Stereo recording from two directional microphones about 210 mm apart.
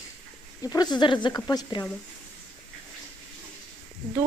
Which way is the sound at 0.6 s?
20° left (ahead or behind).